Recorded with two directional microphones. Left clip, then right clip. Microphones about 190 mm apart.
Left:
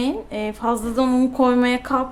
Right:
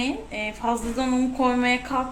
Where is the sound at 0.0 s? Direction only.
50° left (ahead or behind).